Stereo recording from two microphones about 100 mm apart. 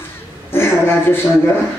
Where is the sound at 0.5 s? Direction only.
25° left (ahead or behind).